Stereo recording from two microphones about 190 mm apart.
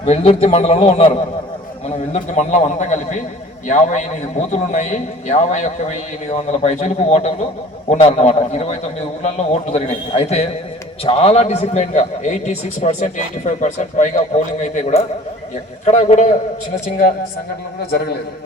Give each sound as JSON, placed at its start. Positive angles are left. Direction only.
{"t": 0.0, "sound": "a man's voice", "side_deg": 30}
{"t": 2.1, "sound": "a man's voice", "side_deg": 35}